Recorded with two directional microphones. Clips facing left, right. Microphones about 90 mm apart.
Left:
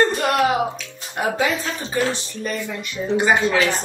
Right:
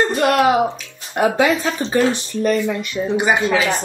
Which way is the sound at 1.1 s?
65° right (ahead or behind).